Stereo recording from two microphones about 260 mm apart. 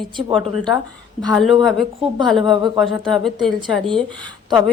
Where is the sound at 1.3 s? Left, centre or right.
Centre.